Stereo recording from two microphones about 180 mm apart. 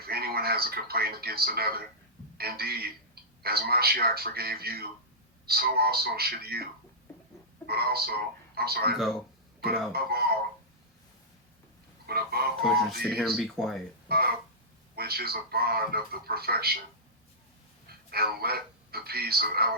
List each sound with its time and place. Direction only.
0.0 s speech: 60° right (ahead or behind)
7.7 s speech: 60° right (ahead or behind)
12.0 s speech: 60° right (ahead or behind)
12.6 s speech: centre (ahead or behind)
14.1 s speech: 60° right (ahead or behind)
17.8 s speech: 60° right (ahead or behind)